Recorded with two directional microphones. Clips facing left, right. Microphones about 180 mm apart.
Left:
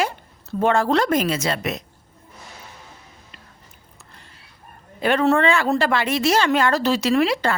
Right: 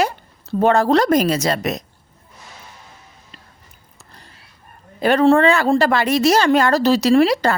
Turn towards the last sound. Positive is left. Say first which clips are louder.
# right 5 dB
turn(degrees=-40)  # may be behind; listen again after turning